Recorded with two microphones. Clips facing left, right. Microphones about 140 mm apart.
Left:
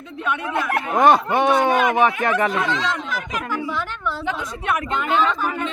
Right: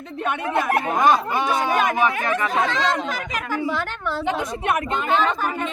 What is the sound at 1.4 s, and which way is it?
Speech, 20° left (ahead or behind).